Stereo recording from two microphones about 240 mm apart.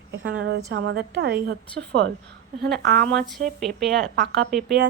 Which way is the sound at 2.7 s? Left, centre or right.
Right.